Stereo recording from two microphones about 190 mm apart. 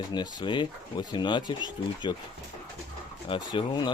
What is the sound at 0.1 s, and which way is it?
Speech, 25° left (ahead or behind).